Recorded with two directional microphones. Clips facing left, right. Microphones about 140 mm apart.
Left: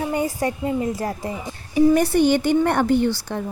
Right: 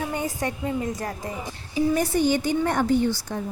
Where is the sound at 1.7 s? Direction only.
65° left (ahead or behind).